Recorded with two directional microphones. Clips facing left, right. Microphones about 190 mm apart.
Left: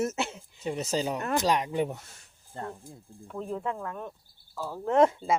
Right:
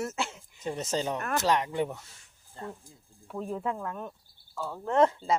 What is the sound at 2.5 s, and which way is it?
Speech, 60° left (ahead or behind).